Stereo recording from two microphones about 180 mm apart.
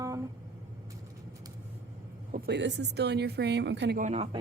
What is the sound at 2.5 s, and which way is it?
A woman's voice, 75° right (ahead or behind).